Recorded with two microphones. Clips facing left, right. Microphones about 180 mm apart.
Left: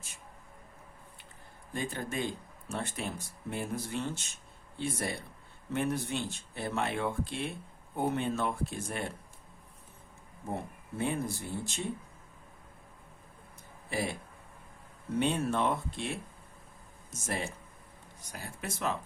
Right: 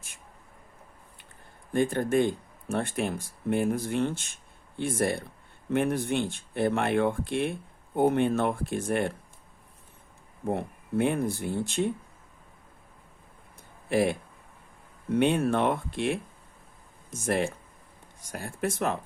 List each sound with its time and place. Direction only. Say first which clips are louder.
1.7 s speech: right 11 dB; 55° right (ahead or behind)
10.5 s speech: right 9 dB; 65° right (ahead or behind)
13.9 s speech: right 10 dB; 65° right (ahead or behind)
15.2 s speech: right 6 dB; 60° right (ahead or behind)